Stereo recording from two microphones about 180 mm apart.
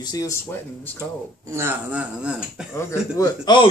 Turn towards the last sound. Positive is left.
turn(degrees=25)  # may be behind; listen again after turning